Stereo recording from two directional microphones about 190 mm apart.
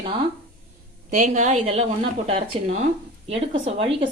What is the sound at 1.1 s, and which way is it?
A woman's voice, 40° right (ahead or behind).